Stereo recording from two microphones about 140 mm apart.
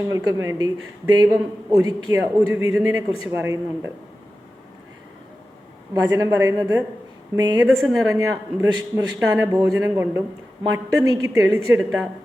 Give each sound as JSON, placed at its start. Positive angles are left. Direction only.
{"t": 0.0, "sound": "a man's voice", "side_deg": -20}
{"t": 5.9, "sound": "a man's voice", "side_deg": -20}
{"t": 7.8, "sound": "speech", "side_deg": 0}
{"t": 8.1, "sound": "a man's voice", "side_deg": -20}